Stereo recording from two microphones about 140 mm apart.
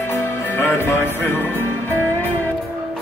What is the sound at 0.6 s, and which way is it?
Music, 15° left (ahead or behind).